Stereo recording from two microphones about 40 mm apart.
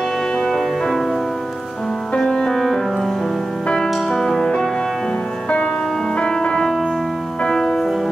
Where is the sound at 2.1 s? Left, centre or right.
Centre.